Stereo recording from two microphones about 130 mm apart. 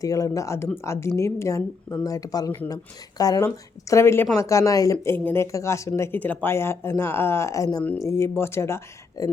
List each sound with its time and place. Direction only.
0.0 s speech: 25° left (ahead or behind)